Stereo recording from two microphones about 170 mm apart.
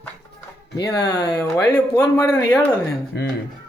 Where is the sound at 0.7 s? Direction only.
20° left (ahead or behind).